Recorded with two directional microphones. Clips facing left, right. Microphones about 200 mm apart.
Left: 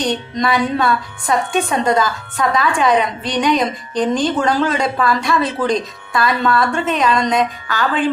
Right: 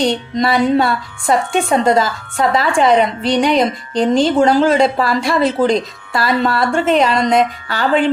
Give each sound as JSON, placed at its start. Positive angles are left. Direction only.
{"t": 0.0, "sound": "a woman's voice", "side_deg": -25}